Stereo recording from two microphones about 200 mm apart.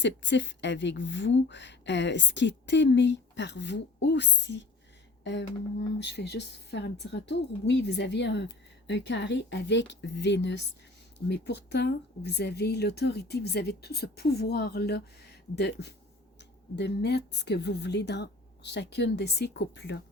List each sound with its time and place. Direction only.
0.0 s speech: 65° left (ahead or behind)